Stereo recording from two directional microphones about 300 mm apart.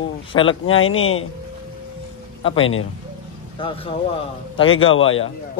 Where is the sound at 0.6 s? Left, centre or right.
Left.